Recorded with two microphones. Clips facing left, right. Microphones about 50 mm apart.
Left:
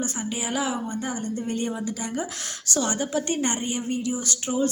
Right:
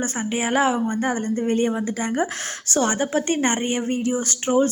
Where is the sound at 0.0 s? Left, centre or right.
Right.